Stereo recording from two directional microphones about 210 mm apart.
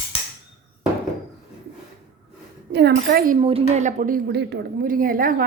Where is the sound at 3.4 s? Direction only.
30° right (ahead or behind).